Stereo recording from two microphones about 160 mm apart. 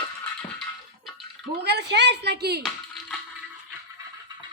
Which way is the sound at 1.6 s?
90° right.